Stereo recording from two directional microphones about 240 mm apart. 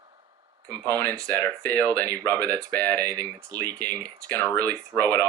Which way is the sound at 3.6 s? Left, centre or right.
Centre.